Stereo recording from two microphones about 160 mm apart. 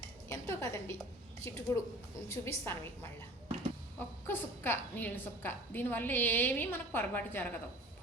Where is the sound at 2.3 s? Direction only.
15° left (ahead or behind).